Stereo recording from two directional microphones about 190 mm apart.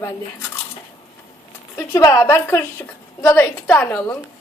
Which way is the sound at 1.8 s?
15° left (ahead or behind).